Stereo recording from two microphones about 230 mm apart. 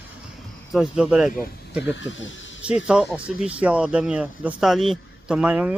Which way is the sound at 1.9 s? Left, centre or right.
Left.